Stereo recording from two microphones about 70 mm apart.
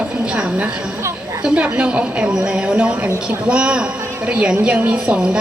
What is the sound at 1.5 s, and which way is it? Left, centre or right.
A woman's voice, centre.